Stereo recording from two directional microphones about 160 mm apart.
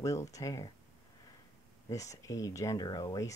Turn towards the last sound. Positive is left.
turn(degrees=25)  # may be behind; listen again after turning